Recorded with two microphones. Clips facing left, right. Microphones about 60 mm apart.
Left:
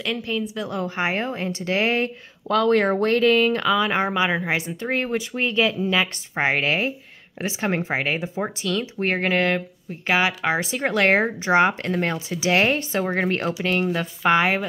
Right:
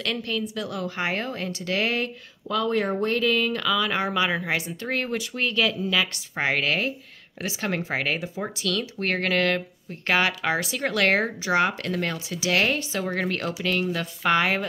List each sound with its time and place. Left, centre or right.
0.0 s a woman's voice: centre
0.4 s speech: left
2.4 s speech: left; by 14.6 s centre